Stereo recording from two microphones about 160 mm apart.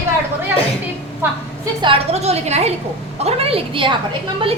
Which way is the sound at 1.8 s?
40° right (ahead or behind).